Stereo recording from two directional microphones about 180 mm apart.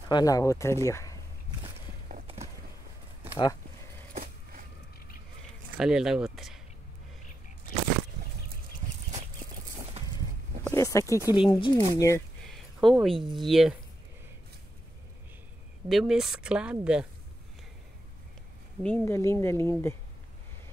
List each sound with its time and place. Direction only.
0.1 s speech: 20° left (ahead or behind)
5.8 s speech: 5° right (ahead or behind)
8.8 s chicken: 40° right (ahead or behind)
10.6 s speech: 15° left (ahead or behind)
12.4 s a sound: centre (ahead or behind)
13.4 s speech: centre (ahead or behind)
15.9 s speech: centre (ahead or behind)
18.8 s speech: 10° left (ahead or behind)